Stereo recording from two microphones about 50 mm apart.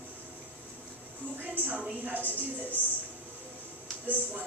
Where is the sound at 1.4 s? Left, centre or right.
Right.